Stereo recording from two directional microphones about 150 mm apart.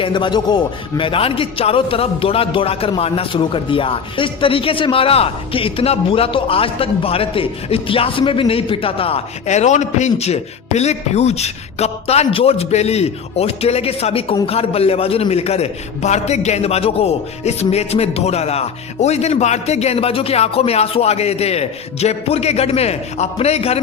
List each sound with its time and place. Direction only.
0.0 s a man's voice: 30° left (ahead or behind)